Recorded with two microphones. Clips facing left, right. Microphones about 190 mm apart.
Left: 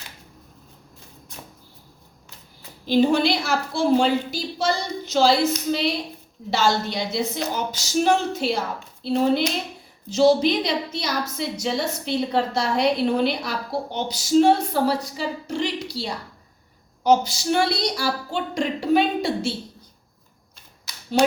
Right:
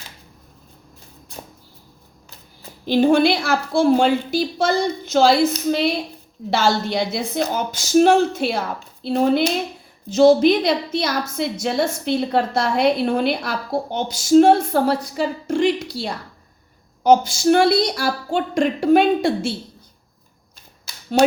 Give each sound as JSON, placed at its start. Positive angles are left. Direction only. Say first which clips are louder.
{"t": 2.8, "sound": "a woman's voice", "louder": "right 3 dB", "side_deg": -55}
{"t": 6.5, "sound": "a woman's voice", "louder": "right 3 dB", "side_deg": -55}